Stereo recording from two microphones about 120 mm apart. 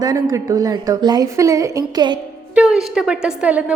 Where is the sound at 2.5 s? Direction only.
5° right (ahead or behind).